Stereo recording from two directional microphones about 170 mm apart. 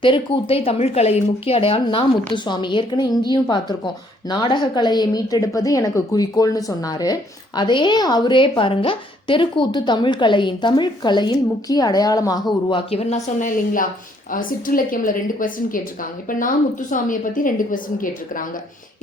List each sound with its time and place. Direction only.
0.0 s a woman's voice: 30° left (ahead or behind); by 15.8 s 55° left (ahead or behind)
16.9 s a woman's voice: 50° left (ahead or behind)